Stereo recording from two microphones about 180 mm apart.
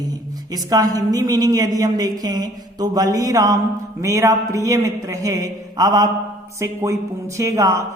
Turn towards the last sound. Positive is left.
turn(degrees=-15)  # may be behind; listen again after turning